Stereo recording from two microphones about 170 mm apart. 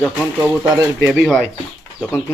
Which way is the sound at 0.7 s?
20° right (ahead or behind).